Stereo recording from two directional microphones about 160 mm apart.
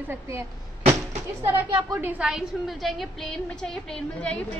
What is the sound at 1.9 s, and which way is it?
A woman's voice, 10° right (ahead or behind).